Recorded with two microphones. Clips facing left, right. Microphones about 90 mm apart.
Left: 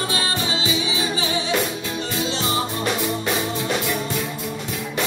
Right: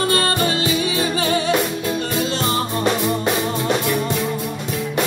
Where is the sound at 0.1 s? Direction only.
55° right (ahead or behind).